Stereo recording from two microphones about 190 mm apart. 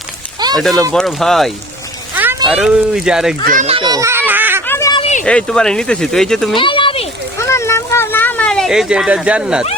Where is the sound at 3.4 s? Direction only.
45° right (ahead or behind).